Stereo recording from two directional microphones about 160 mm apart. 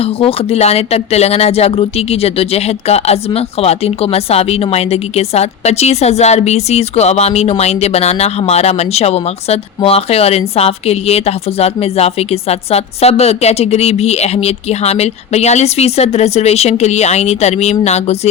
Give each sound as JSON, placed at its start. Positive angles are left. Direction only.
{"t": 0.0, "sound": "speech", "side_deg": 35}